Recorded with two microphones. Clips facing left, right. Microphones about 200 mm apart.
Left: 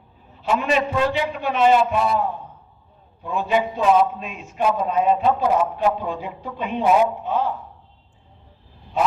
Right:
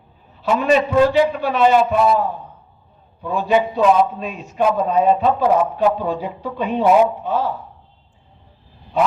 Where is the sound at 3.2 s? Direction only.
40° right (ahead or behind).